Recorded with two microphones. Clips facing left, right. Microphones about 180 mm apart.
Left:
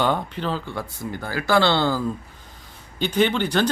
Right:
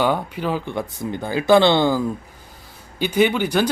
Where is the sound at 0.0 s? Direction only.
10° right (ahead or behind).